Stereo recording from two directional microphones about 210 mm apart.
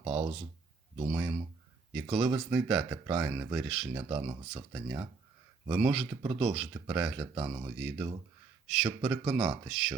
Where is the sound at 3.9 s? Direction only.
20° right (ahead or behind).